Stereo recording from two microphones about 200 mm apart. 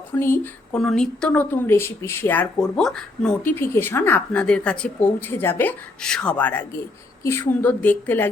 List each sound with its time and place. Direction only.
0.1 s speech: 10° left (ahead or behind)